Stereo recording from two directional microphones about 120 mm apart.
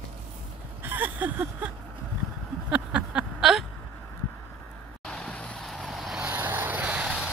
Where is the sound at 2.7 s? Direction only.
10° right (ahead or behind).